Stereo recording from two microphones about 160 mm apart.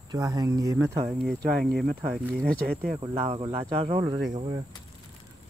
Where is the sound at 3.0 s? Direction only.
35° right (ahead or behind).